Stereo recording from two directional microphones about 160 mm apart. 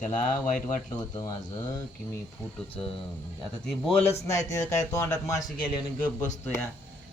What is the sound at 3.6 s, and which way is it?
Speech, centre (ahead or behind).